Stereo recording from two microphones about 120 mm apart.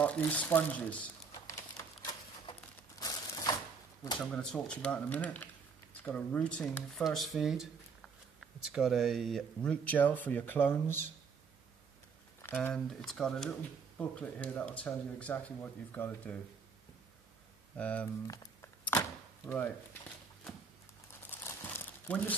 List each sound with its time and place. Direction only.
0.0 s speech: 10° left (ahead or behind)
3.0 s a sound: 30° left (ahead or behind)
4.3 s speech: 10° left (ahead or behind)
12.4 s speech: 15° left (ahead or behind)
12.7 s speech: 5° left (ahead or behind)
17.7 s speech: 10° left (ahead or behind)
18.2 s a sound: 30° left (ahead or behind)
21.3 s crumpling: 20° left (ahead or behind)